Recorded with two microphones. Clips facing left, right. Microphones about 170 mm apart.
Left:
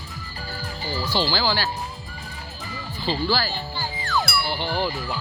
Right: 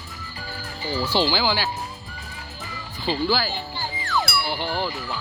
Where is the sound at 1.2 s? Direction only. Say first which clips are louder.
Right 1 dB; 15° right (ahead or behind).